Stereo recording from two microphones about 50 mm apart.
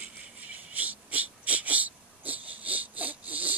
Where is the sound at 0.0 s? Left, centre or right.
Right.